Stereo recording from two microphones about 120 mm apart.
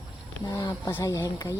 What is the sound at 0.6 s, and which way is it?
Speech, 35° left (ahead or behind).